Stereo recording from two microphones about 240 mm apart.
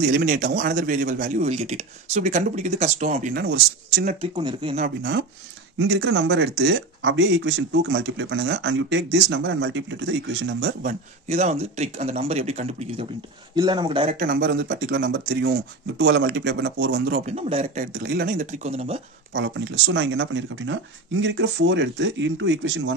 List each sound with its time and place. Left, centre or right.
0.0 s speech: right
3.3 s speech: right
4.7 s speech: right
10.8 s speech: right
14.2 s speech: right
17.3 s speech: right
17.9 s speech: right
19.3 s speech: right